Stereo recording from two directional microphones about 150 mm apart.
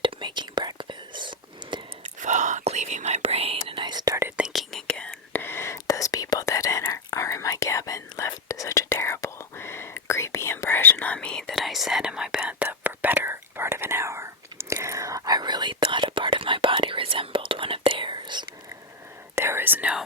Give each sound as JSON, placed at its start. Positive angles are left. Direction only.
{"t": 0.0, "sound": "whispering", "side_deg": -30}
{"t": 2.2, "sound": "whispering", "side_deg": -55}
{"t": 4.4, "sound": "whispering", "side_deg": -5}
{"t": 19.4, "sound": "whispering", "side_deg": -15}